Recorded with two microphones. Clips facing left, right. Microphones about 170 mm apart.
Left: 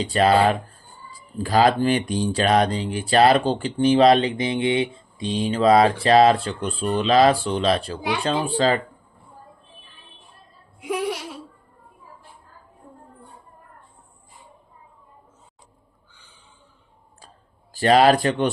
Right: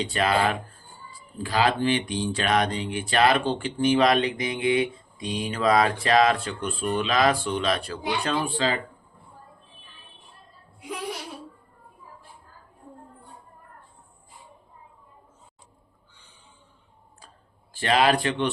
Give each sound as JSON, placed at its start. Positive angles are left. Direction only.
{"t": 0.0, "sound": "speech", "side_deg": 35}
{"t": 10.8, "sound": "a sound", "side_deg": 85}
{"t": 17.7, "sound": "speech", "side_deg": 40}